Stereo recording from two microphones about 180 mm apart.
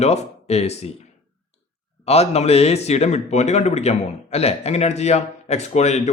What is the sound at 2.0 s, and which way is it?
A man's voice, 35° left (ahead or behind).